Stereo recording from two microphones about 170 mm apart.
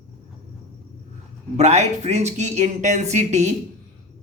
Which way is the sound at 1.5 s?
40° right (ahead or behind).